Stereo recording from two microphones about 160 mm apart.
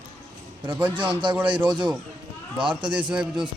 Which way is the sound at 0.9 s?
30° right (ahead or behind).